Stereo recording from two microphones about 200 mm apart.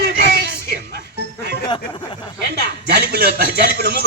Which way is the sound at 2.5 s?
50° right (ahead or behind).